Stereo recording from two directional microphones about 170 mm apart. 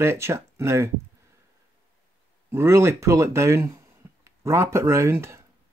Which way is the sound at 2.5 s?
15° right (ahead or behind).